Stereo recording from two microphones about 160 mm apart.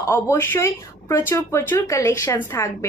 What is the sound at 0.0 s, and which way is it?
A woman's voice, 15° left (ahead or behind).